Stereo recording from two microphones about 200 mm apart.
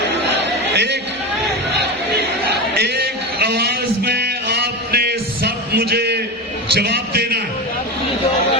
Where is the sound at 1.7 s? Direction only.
55° right (ahead or behind).